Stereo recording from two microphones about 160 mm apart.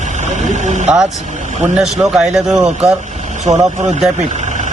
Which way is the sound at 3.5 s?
45° right (ahead or behind).